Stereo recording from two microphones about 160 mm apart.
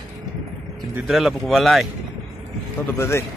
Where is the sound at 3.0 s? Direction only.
15° left (ahead or behind).